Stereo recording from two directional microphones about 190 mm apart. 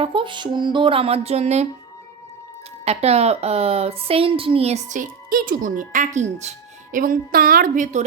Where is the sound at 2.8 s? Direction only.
35° right (ahead or behind).